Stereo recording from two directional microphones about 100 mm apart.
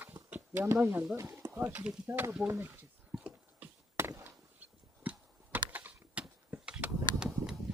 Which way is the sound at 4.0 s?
20° right (ahead or behind).